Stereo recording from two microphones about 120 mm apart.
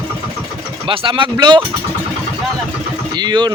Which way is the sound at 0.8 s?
45° right (ahead or behind).